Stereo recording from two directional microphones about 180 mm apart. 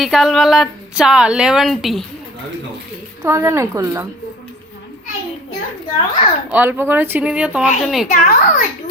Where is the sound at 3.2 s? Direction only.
15° right (ahead or behind).